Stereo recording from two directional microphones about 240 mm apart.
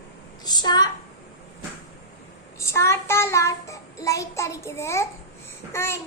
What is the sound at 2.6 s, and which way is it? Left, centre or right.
Child singing, centre.